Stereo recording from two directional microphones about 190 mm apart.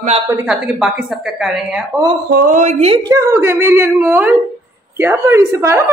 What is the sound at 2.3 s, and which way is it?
Speech, 45° right (ahead or behind).